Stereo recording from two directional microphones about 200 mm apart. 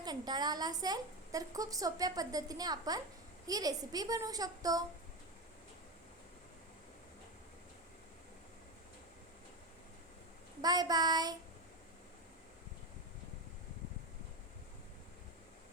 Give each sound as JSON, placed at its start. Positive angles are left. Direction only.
{"t": 0.0, "sound": "a woman's voice", "side_deg": -20}
{"t": 10.6, "sound": "a woman's voice", "side_deg": -20}